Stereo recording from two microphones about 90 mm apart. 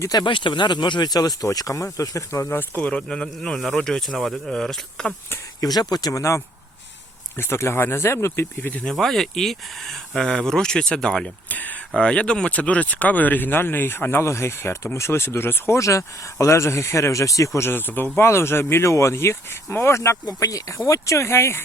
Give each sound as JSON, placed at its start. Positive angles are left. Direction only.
{"t": 0.1, "sound": "speech", "side_deg": 60}
{"t": 2.8, "sound": "speech", "side_deg": 10}
{"t": 5.5, "sound": "speech", "side_deg": 50}
{"t": 8.7, "sound": "speech", "side_deg": 10}
{"t": 11.4, "sound": "speech", "side_deg": 20}
{"t": 15.8, "sound": "speech", "side_deg": 35}